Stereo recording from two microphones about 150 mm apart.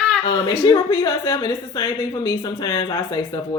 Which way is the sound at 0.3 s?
25° left (ahead or behind).